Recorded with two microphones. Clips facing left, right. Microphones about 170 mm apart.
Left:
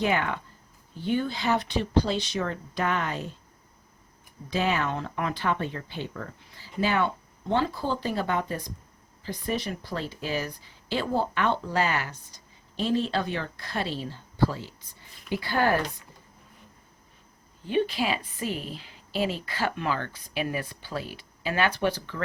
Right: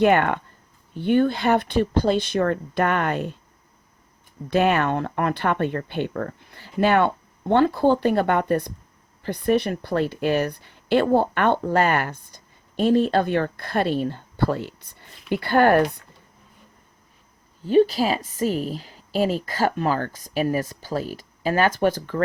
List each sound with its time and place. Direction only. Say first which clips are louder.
0.0 s speech: right 8 dB; 60° right (ahead or behind)
4.4 s speech: right 7 dB; 60° right (ahead or behind)
17.7 s a woman's voice: right 8 dB; 40° right (ahead or behind)